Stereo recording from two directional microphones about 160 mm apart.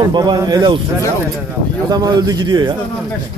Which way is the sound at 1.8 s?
25° right (ahead or behind).